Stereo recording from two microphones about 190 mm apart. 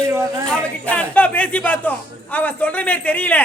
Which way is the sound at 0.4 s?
5° left (ahead or behind).